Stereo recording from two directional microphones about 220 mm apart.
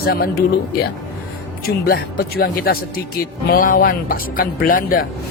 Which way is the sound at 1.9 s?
45° left (ahead or behind).